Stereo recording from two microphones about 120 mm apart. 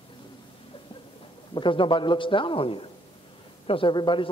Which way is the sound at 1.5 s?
45° left (ahead or behind).